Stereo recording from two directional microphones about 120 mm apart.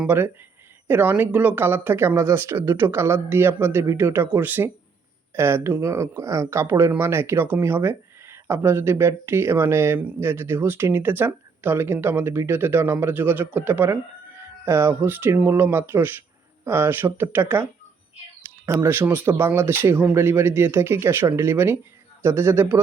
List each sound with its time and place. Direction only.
0.1 s speech: 20° right (ahead or behind)